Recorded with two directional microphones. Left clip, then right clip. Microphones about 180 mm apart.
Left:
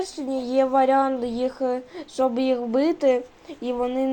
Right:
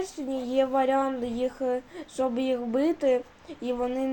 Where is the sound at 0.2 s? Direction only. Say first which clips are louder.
Left 4 dB; 10° left (ahead or behind).